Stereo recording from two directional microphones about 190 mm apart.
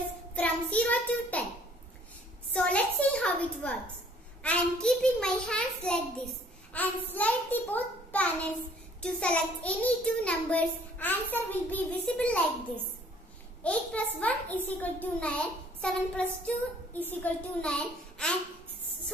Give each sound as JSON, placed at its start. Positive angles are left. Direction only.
{"t": 0.3, "sound": "child singing", "side_deg": 5}
{"t": 2.5, "sound": "a sound", "side_deg": 5}
{"t": 4.4, "sound": "a child's voice", "side_deg": 5}
{"t": 13.6, "sound": "a child's voice", "side_deg": 5}